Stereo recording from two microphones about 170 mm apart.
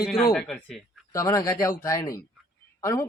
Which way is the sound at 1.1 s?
20° left (ahead or behind).